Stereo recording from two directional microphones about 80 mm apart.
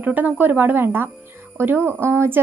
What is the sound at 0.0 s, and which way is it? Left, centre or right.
Speech, right.